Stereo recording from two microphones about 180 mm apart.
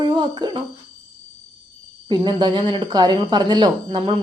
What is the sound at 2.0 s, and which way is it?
A child's voice, 25° right (ahead or behind).